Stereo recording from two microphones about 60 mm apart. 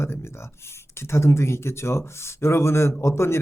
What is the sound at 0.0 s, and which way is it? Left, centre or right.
Speech, left.